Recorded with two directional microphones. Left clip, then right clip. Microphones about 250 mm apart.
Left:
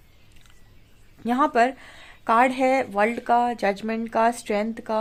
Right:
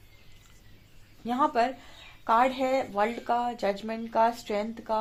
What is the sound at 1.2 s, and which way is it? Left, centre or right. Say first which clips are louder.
Speech: left 5 dB; left.